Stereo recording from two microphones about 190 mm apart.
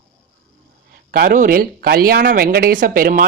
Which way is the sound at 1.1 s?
50° right (ahead or behind).